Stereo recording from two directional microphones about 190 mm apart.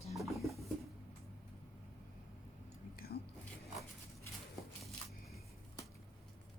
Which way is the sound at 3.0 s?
55° left (ahead or behind).